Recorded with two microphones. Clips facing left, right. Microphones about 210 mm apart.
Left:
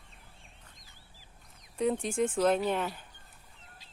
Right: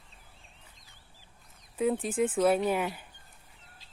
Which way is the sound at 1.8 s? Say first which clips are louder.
Right 1 dB; 5° right (ahead or behind).